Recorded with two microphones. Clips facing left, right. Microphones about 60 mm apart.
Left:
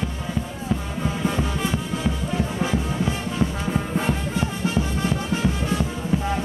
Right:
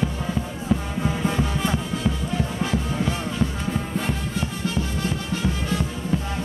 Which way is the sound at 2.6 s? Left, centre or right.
Centre.